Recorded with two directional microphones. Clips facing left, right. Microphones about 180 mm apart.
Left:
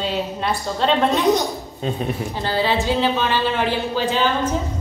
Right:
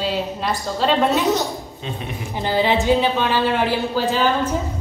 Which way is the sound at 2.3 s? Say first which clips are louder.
Right 4 dB; 15° right (ahead or behind).